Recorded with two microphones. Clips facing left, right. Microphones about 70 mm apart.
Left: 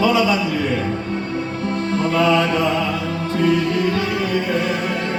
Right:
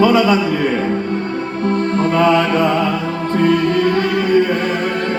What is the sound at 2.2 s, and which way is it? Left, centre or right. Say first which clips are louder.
Music: right 3 dB; right.